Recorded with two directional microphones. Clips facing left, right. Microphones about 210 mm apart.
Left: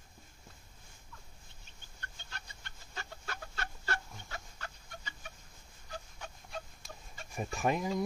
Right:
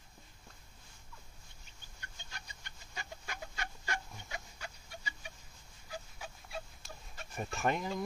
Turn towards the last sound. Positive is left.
turn(degrees=0)  # may be behind; listen again after turning